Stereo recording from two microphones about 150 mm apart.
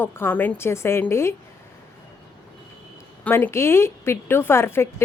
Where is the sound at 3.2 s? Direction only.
15° left (ahead or behind).